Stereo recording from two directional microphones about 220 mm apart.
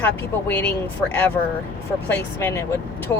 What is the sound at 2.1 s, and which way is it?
Speech, 10° left (ahead or behind).